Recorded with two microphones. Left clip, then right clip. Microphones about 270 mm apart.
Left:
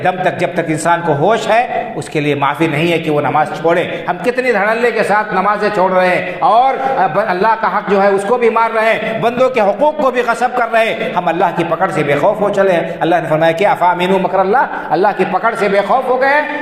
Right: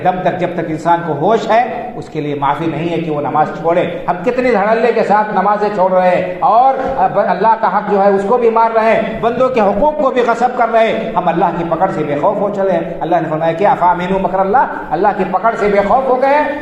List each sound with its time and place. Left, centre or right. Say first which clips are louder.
0.9 s a man's voice: even; left
3.3 s a man's voice: right 3 dB; left
15.0 s a man's voice: right 2 dB; left